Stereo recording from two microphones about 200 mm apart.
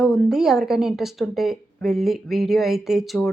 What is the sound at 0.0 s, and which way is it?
Speech, centre (ahead or behind).